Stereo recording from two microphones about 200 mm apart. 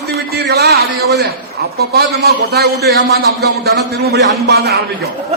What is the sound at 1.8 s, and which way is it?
A man's voice, 50° right (ahead or behind).